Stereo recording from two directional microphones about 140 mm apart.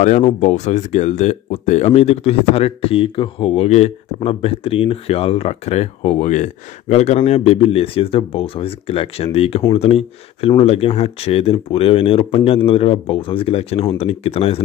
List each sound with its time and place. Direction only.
0.0 s speech: 55° left (ahead or behind)